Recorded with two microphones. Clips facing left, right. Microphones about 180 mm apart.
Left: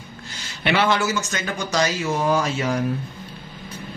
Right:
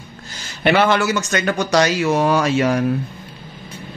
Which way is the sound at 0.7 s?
55° right (ahead or behind).